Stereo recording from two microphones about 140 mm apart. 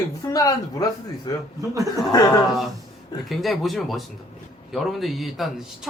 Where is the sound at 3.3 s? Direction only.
Centre (ahead or behind).